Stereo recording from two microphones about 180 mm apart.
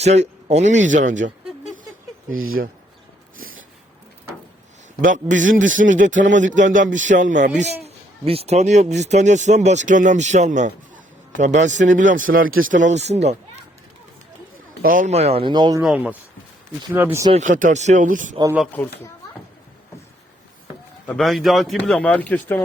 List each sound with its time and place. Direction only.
0.0 s speech: 40° right (ahead or behind)
4.9 s a man's voice: 45° right (ahead or behind)
7.9 s a man's voice: 35° right (ahead or behind)
14.8 s speech: 50° right (ahead or behind); by 15.8 s 25° right (ahead or behind)
15.8 s a man's voice: 5° right (ahead or behind)
17.3 s a man's voice: 45° right (ahead or behind)
18.7 s speech: 15° left (ahead or behind)
21.1 s a man's voice: centre (ahead or behind)